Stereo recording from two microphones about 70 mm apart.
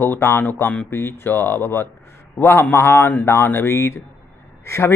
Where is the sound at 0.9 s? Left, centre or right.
Left.